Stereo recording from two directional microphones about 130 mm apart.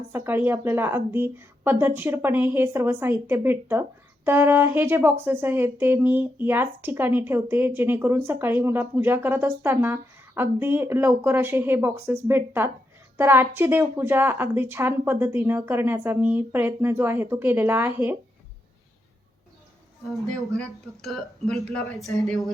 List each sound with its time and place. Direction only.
0.1 s speech: 15° right (ahead or behind)
20.1 s speech: 5° left (ahead or behind)